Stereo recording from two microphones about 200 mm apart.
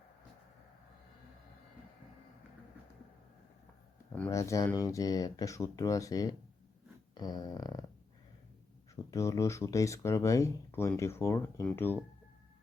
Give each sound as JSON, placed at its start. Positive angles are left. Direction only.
{"t": 4.1, "sound": "speech", "side_deg": 10}
{"t": 7.1, "sound": "a sound", "side_deg": 20}
{"t": 9.0, "sound": "speech", "side_deg": 15}